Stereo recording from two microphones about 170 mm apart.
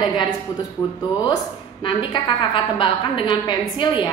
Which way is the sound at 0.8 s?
30° left (ahead or behind).